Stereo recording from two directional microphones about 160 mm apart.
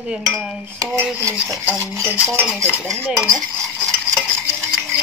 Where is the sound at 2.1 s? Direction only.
10° right (ahead or behind).